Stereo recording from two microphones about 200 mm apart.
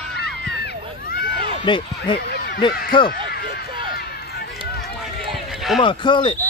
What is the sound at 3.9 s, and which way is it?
Run, 50° left (ahead or behind).